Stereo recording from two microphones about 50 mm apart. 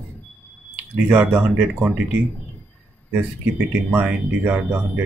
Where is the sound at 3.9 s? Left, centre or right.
Right.